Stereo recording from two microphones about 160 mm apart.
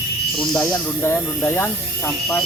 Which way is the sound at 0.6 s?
15° left (ahead or behind).